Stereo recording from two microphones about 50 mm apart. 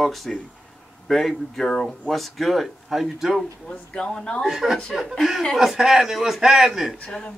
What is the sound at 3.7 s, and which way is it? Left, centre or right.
Speech, centre.